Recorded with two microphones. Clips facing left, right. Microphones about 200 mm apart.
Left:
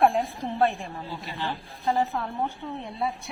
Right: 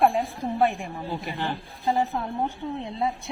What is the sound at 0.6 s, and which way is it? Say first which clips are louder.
A woman's voice: even; 15° right (ahead or behind).